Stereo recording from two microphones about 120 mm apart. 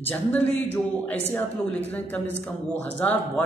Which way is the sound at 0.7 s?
15° left (ahead or behind).